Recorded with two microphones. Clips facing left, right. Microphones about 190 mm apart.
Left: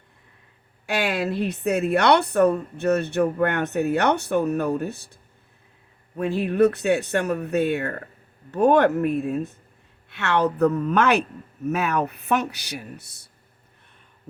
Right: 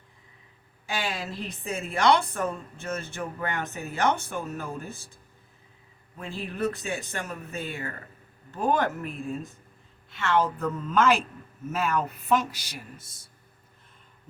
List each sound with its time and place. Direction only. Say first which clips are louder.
0.9 s speech: left 8 dB; 70° left (ahead or behind)